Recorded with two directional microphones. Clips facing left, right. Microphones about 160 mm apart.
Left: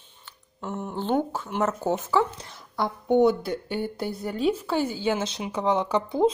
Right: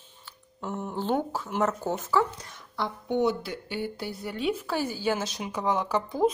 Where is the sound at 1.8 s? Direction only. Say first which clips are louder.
Left 3 dB; 20° left (ahead or behind).